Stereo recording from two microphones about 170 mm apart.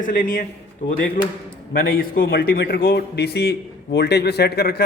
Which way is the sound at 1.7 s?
60° left (ahead or behind).